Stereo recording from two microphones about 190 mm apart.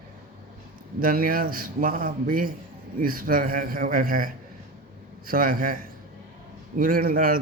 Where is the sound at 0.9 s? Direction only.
50° right (ahead or behind).